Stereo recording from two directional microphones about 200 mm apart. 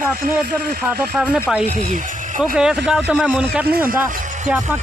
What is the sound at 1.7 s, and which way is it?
Speech, 35° right (ahead or behind).